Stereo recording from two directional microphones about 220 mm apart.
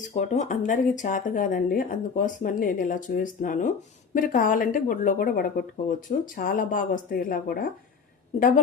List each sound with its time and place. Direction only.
0.1 s speech: 35° left (ahead or behind)